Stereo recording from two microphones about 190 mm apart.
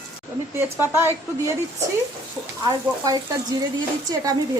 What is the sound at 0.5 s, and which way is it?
A woman's voice, 10° right (ahead or behind).